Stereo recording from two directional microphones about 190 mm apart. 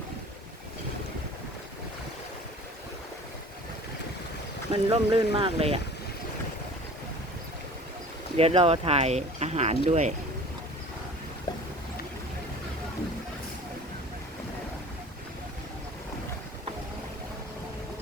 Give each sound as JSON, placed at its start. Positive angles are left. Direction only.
{"t": 4.7, "sound": "speech", "side_deg": -30}
{"t": 8.4, "sound": "speech", "side_deg": -30}